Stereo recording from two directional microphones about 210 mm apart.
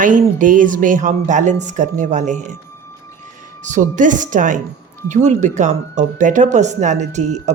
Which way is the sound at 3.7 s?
35° right (ahead or behind).